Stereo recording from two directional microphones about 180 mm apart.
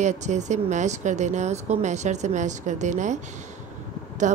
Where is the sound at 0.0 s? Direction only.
40° right (ahead or behind).